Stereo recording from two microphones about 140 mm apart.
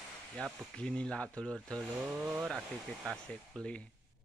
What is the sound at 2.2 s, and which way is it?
Speech, 15° right (ahead or behind).